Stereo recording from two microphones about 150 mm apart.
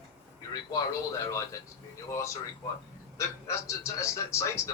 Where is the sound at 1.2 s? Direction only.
20° left (ahead or behind).